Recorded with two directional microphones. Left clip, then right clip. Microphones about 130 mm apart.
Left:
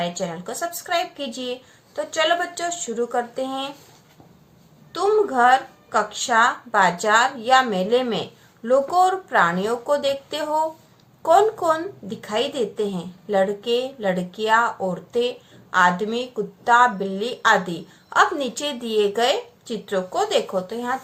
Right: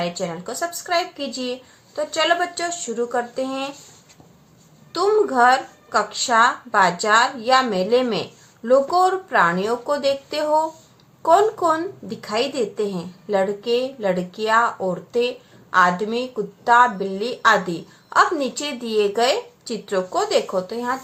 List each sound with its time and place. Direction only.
0.0 s a woman's voice: 25° right (ahead or behind)
4.9 s a woman's voice: 30° right (ahead or behind)